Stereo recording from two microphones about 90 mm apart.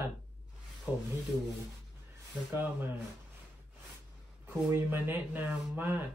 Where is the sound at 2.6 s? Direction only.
20° right (ahead or behind).